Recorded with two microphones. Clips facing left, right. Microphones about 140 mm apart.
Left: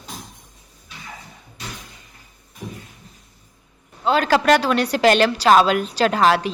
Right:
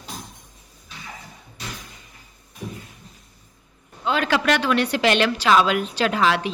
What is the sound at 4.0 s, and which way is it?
A woman's voice, 40° left (ahead or behind).